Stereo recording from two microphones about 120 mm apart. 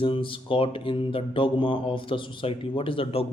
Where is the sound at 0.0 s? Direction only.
45° left (ahead or behind).